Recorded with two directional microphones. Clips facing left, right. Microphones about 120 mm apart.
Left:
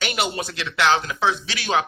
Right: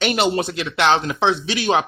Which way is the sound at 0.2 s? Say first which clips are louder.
Right 6 dB; 25° right (ahead or behind).